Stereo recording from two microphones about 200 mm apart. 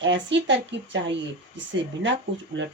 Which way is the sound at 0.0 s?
65° right (ahead or behind).